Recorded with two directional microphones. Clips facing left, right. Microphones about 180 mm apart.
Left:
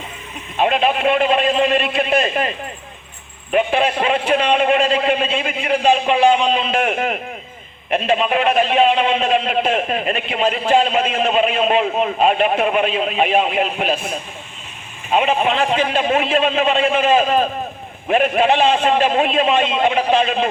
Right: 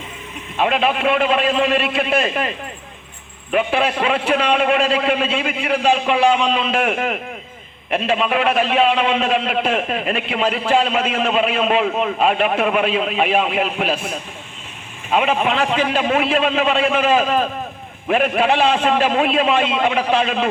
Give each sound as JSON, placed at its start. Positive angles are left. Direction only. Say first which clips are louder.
{"t": 0.5, "sound": "a man's voice", "louder": "left 1 dB", "side_deg": 30}
{"t": 3.5, "sound": "a man's voice", "louder": "left 1 dB", "side_deg": 30}